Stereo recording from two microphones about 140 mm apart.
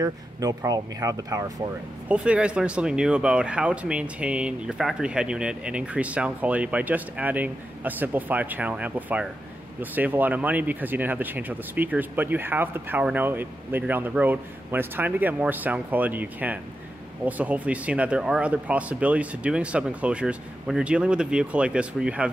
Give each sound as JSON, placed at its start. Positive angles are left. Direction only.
{"t": 0.0, "sound": "speech", "side_deg": -25}
{"t": 2.0, "sound": "speech", "side_deg": -10}